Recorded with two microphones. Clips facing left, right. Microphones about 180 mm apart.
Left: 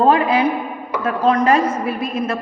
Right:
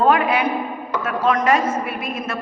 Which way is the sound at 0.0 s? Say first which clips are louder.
Left 3 dB; 30° left (ahead or behind).